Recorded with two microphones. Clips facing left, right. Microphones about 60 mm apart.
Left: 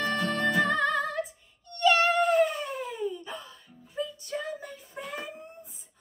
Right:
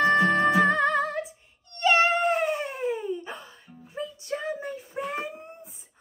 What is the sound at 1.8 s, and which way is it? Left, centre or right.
Cat, right.